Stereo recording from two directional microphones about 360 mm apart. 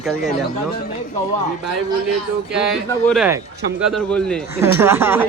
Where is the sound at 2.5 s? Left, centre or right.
Centre.